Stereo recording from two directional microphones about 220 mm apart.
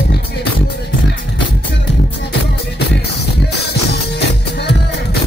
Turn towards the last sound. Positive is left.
turn(degrees=50)  # may be behind; listen again after turning